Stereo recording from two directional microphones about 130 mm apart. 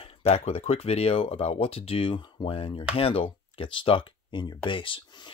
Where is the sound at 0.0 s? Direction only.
50° left (ahead or behind).